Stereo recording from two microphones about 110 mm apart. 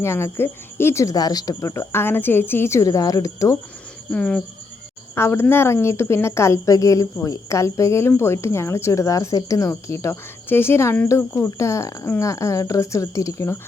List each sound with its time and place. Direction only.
0.0 s speech: 25° left (ahead or behind)
4.1 s speech: 10° left (ahead or behind)
5.1 s speech: 25° left (ahead or behind)